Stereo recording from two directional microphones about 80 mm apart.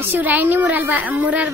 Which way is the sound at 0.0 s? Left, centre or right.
Right.